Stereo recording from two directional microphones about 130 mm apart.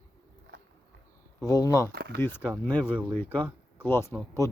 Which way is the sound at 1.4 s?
25° left (ahead or behind).